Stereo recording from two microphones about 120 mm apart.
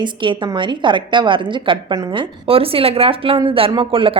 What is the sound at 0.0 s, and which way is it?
Speech, 40° right (ahead or behind).